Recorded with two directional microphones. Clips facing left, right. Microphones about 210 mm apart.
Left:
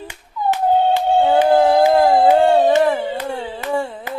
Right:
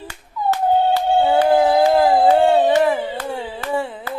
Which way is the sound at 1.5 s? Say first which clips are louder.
Left 1 dB; 5° right (ahead or behind).